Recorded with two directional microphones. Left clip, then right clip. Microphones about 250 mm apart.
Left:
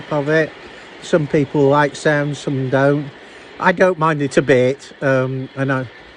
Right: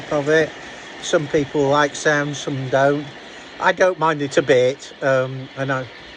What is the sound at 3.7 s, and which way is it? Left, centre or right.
Speech, left.